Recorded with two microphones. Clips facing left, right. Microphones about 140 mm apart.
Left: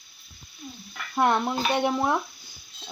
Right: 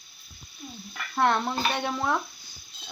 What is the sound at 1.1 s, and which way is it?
Speech, 15° left (ahead or behind).